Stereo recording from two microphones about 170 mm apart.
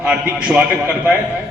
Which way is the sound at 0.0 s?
5° right (ahead or behind).